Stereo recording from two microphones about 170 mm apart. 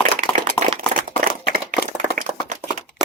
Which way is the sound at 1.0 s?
50° right (ahead or behind).